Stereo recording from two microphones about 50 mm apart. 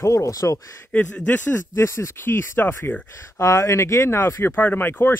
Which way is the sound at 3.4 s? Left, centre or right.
Left.